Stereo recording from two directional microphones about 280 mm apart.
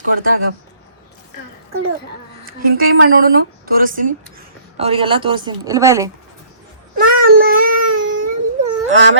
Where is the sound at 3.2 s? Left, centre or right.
Right; by 6.1 s centre.